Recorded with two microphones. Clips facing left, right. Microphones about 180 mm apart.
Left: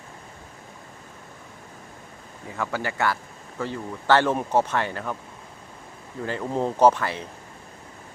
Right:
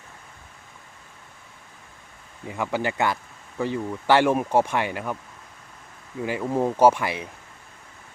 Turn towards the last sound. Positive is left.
turn(degrees=-15)  # may be behind; listen again after turning